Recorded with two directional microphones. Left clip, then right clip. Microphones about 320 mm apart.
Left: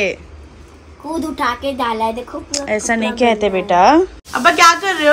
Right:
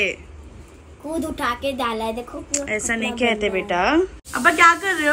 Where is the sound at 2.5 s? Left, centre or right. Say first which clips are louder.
Left 6 dB; centre.